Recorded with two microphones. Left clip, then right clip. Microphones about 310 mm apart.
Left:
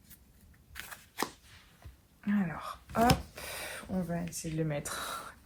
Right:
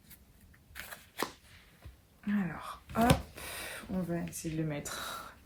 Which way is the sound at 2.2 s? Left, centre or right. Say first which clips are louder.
Left 2 dB; centre.